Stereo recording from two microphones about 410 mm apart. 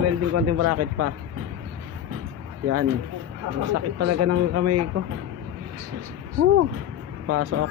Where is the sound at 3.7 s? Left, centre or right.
Right.